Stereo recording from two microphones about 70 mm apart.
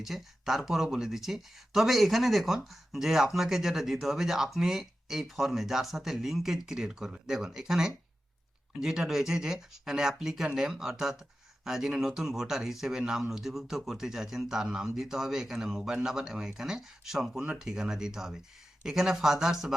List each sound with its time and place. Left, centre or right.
0.0 s speech: centre
17.4 s speech: centre